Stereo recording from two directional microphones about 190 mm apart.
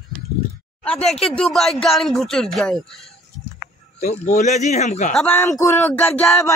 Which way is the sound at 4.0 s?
35° left (ahead or behind).